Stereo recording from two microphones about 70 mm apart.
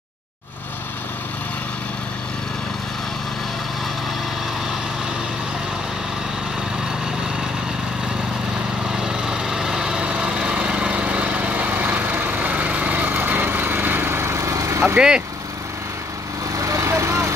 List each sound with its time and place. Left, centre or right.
9.0 s lawn mower: centre; by 14.8 s right
15.0 s speech: centre
16.5 s vehicle: right